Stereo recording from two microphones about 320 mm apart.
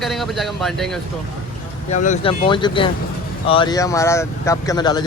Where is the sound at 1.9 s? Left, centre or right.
Left.